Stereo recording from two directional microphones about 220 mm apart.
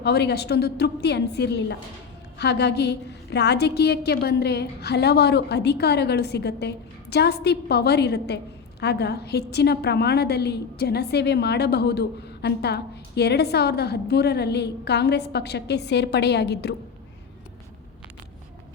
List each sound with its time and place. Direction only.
0.0 s a woman's voice: 50° left (ahead or behind)